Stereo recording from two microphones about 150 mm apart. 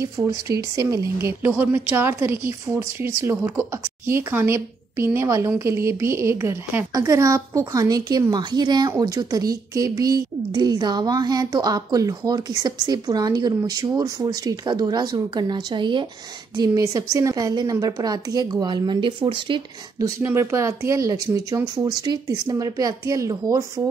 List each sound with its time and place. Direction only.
0.0 s a woman's voice: 20° right (ahead or behind)
20.2 s a woman's voice: 15° right (ahead or behind)